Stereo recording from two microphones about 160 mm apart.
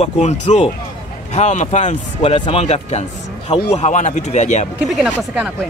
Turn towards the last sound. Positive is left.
turn(degrees=0)  # may be behind; listen again after turning